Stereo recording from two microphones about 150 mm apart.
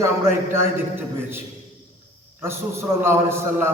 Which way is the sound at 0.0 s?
15° right (ahead or behind).